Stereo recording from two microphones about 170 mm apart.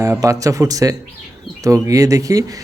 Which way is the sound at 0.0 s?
15° right (ahead or behind).